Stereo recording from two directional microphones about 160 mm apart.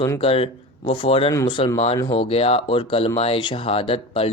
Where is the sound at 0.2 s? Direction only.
35° left (ahead or behind).